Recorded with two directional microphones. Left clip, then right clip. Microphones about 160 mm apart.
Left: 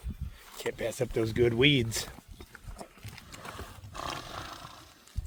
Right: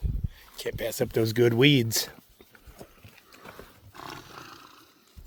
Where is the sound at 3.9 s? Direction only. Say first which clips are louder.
Left 4 dB; 25° left (ahead or behind).